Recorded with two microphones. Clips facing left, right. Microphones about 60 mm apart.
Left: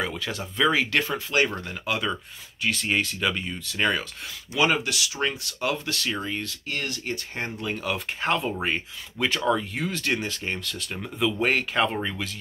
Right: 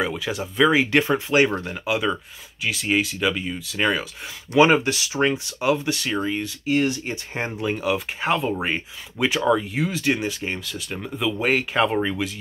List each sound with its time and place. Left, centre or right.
0.0 s speech: centre
1.5 s speech: right
1.9 s speech: centre
4.6 s speech: right; by 12.4 s centre